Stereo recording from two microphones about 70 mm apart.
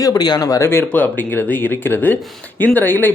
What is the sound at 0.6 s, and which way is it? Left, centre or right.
Speech, left.